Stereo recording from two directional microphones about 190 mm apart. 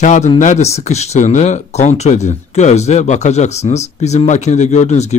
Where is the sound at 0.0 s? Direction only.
40° left (ahead or behind).